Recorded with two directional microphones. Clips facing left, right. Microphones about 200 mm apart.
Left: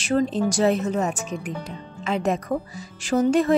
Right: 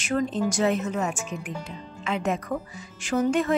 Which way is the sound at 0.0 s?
30° left (ahead or behind).